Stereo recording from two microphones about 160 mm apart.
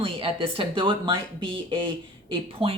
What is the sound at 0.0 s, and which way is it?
Speech, 35° right (ahead or behind).